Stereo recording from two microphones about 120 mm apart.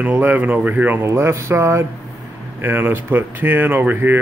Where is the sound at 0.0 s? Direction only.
15° right (ahead or behind).